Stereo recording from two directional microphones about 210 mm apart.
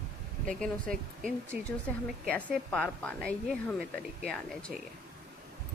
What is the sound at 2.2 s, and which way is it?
A woman's voice, 5° left (ahead or behind).